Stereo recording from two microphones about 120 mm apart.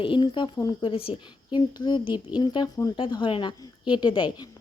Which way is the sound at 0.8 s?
50° left (ahead or behind).